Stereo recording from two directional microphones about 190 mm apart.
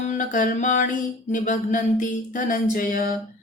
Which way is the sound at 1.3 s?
40° left (ahead or behind).